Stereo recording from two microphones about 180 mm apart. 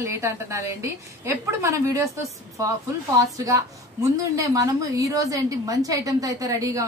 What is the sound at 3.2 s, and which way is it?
A woman's voice, 20° right (ahead or behind).